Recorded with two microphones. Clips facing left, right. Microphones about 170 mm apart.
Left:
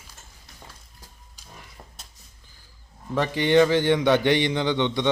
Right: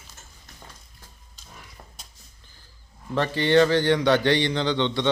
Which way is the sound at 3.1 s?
15° left (ahead or behind).